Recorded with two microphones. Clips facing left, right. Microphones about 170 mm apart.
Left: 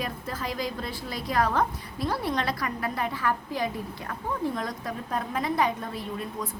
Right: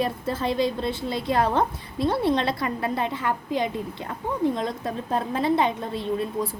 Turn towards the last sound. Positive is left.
turn(degrees=-25)  # may be behind; listen again after turning